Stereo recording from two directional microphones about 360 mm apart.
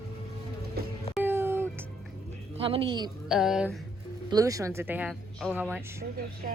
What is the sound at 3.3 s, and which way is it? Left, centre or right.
A woman's voice, centre.